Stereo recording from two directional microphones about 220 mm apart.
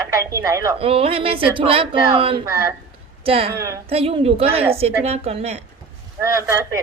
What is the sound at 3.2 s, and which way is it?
A woman's voice, 25° right (ahead or behind).